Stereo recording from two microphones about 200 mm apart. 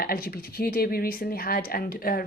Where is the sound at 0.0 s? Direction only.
50° left (ahead or behind).